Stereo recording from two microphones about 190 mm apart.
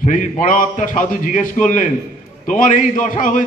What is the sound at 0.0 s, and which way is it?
A man's voice, 40° left (ahead or behind).